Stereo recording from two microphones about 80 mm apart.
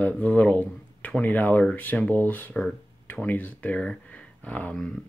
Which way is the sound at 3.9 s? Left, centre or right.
Centre.